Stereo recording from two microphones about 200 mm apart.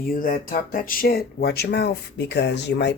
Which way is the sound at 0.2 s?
45° left (ahead or behind).